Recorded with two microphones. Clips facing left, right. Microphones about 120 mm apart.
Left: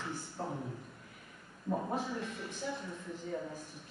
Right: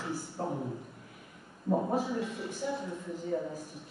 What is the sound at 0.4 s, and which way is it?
Speech, 5° right (ahead or behind).